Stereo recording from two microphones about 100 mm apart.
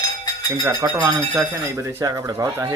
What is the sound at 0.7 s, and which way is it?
Speech, 40° right (ahead or behind).